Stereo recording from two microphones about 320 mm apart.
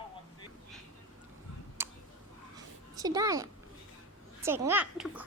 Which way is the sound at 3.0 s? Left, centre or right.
Centre.